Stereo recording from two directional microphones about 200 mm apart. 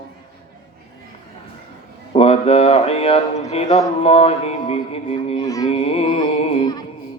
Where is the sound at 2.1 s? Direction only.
30° left (ahead or behind).